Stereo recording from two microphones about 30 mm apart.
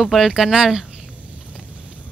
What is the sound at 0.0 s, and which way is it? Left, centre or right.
Speech, centre.